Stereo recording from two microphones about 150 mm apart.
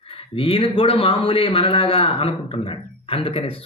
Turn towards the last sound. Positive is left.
turn(degrees=40)  # may be behind; listen again after turning